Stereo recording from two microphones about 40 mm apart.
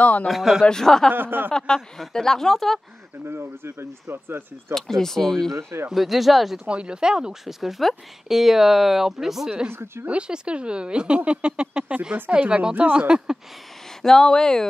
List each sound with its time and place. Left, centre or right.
0.0 s speech: left
0.3 s speech: centre
0.7 s a woman's voice: centre
1.1 s speech: right
2.0 s a woman's voice: centre
3.3 s speech: right
4.7 s a woman's voice: centre
5.9 s speech: centre
6.6 s speech: right
7.4 s speech: centre
9.7 s speech: right
10.0 s speech: right
14.0 s a woman's voice: centre